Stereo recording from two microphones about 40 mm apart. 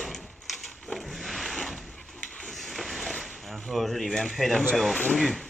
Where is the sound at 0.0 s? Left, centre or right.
Centre.